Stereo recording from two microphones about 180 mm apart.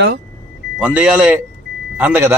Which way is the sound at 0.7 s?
5° right (ahead or behind).